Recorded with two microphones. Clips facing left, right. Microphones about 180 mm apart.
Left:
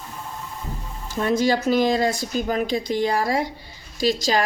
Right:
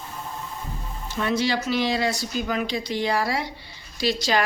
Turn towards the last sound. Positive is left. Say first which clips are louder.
# left 2 dB
turn(degrees=40)  # may be behind; listen again after turning